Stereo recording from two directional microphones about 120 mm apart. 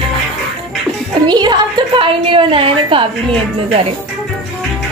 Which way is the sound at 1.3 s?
40° right (ahead or behind).